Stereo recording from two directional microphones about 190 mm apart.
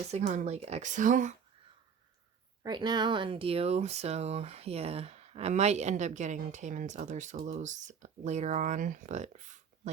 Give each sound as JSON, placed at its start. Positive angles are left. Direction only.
{"t": 0.1, "sound": "speech", "side_deg": -35}
{"t": 2.6, "sound": "speech", "side_deg": -20}